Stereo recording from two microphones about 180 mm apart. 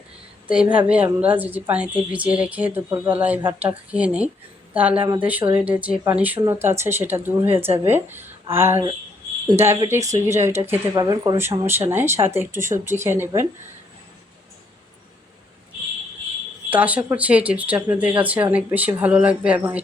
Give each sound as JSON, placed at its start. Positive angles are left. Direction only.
{"t": 0.4, "sound": "a woman's voice", "side_deg": -5}
{"t": 16.6, "sound": "a woman's voice", "side_deg": -10}